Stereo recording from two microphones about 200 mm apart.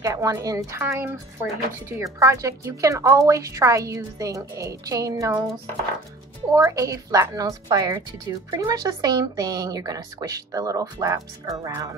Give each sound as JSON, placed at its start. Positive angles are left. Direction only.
{"t": 0.0, "sound": "speech", "side_deg": -15}
{"t": 6.5, "sound": "speech", "side_deg": -15}